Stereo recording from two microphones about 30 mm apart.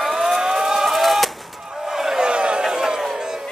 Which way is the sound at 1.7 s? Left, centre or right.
Centre.